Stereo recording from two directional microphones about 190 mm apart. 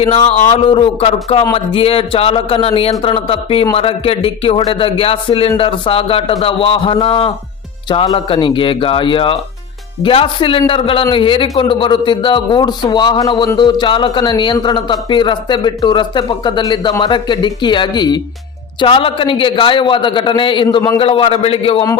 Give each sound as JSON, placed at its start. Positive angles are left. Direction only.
{"t": 0.0, "sound": "a man's voice", "side_deg": 30}